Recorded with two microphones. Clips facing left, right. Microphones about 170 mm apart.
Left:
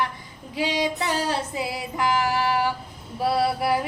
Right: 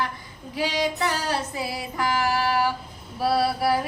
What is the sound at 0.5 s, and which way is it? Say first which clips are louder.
Music: left 1 dB; 20° left (ahead or behind).